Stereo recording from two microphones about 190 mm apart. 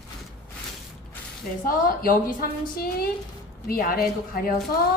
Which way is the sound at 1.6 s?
50° left (ahead or behind).